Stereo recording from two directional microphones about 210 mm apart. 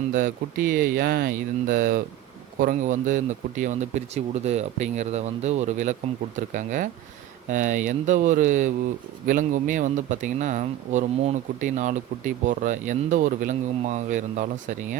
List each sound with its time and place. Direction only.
0.1 s speech: 40° right (ahead or behind)